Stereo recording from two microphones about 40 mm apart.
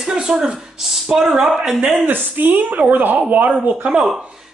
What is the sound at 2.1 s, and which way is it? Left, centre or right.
Speech, right.